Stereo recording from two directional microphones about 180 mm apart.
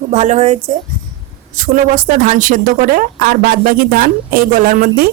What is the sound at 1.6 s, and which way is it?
A woman's voice, 50° right (ahead or behind).